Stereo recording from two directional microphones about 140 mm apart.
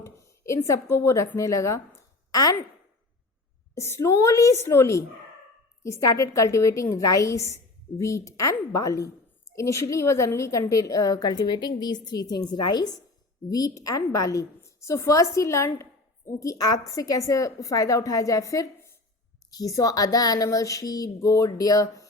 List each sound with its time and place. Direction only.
0.0 s a woman's voice: 20° left (ahead or behind)
3.8 s a woman's voice: 20° left (ahead or behind)